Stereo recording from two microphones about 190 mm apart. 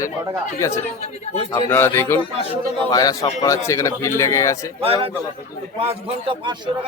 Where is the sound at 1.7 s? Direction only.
10° left (ahead or behind).